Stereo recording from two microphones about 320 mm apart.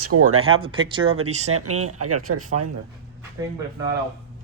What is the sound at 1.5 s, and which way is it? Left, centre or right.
Speech, right.